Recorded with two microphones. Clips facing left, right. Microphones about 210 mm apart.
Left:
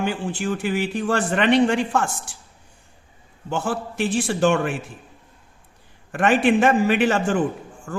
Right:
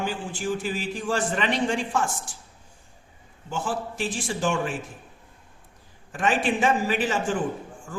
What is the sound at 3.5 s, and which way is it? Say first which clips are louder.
Speech: left 4 dB; 65° left (ahead or behind).